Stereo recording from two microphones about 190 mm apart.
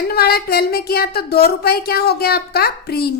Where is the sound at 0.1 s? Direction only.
55° left (ahead or behind).